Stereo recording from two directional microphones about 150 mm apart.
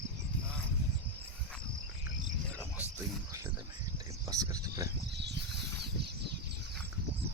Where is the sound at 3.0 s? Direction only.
20° right (ahead or behind).